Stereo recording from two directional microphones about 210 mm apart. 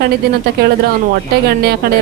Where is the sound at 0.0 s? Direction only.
50° right (ahead or behind).